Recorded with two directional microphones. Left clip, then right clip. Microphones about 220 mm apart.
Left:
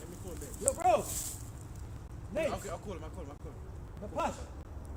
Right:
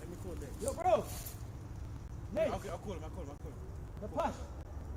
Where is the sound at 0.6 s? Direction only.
45° left (ahead or behind).